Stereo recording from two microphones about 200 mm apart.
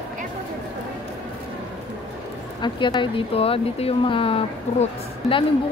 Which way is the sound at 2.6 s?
25° left (ahead or behind).